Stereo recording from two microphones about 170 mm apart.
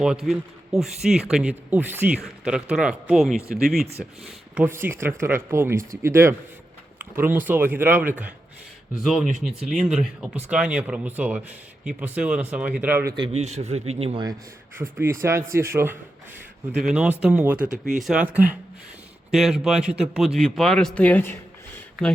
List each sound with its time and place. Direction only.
0.0 s a man's voice: 5° right (ahead or behind)
4.5 s a man's voice: 10° right (ahead or behind)
13.1 s a man's voice: 35° right (ahead or behind)
14.8 s a man's voice: 15° right (ahead or behind); by 21.3 s 10° left (ahead or behind)